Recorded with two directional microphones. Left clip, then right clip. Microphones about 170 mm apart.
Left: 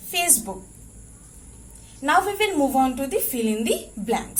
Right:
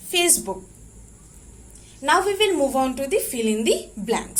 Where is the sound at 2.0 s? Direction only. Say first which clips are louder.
Right 1 dB; 20° right (ahead or behind).